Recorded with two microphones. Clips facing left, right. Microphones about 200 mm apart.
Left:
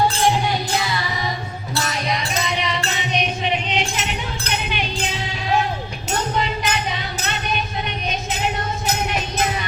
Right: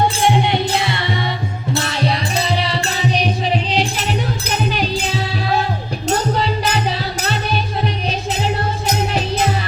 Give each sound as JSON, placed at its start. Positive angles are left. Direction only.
{"t": 0.4, "sound": "music", "side_deg": -25}
{"t": 6.3, "sound": "music", "side_deg": -35}